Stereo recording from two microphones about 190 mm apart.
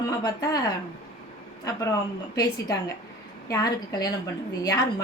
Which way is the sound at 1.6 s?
15° left (ahead or behind).